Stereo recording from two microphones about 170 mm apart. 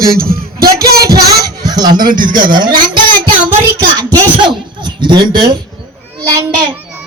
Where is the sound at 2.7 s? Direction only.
25° right (ahead or behind).